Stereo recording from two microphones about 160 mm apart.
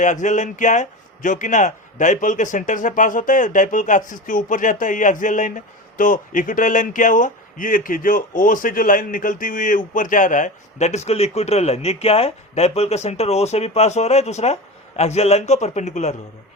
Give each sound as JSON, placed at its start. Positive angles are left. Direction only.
{"t": 0.0, "sound": "speech", "side_deg": 50}